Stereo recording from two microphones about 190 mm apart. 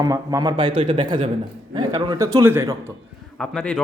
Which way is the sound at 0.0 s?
20° right (ahead or behind).